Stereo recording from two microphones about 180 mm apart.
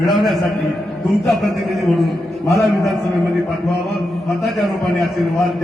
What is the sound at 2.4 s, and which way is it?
Speech, 20° left (ahead or behind).